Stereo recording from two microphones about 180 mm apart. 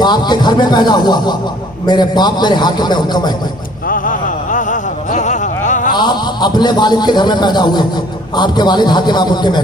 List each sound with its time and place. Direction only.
0.0 s a man's voice: 25° left (ahead or behind)
3.9 s a sound: 45° left (ahead or behind)
5.9 s a man's voice: 25° left (ahead or behind)